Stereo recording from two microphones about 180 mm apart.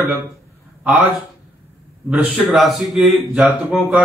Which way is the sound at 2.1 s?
10° right (ahead or behind).